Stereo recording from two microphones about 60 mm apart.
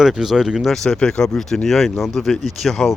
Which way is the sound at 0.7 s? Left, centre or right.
Centre.